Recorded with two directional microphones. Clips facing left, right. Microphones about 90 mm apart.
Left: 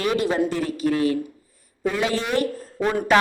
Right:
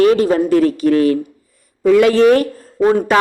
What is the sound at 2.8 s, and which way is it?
Speech, 30° right (ahead or behind).